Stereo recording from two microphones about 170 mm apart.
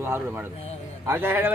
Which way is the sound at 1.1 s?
10° right (ahead or behind).